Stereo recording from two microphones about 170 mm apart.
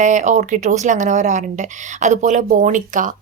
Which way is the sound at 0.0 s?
45° right (ahead or behind).